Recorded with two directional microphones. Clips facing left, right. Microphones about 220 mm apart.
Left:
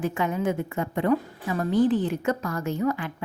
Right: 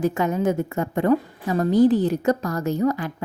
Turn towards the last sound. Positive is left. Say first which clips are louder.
# right 4 dB
turn(degrees=-40)  # may be behind; listen again after turning